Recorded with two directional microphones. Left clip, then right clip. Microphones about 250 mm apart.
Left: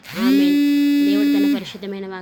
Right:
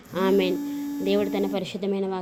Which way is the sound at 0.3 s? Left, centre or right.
Centre.